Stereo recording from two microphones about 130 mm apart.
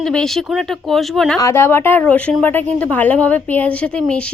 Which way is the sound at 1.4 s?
20° left (ahead or behind).